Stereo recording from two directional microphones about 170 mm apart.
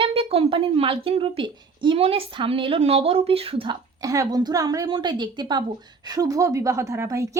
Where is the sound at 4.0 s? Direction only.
20° right (ahead or behind).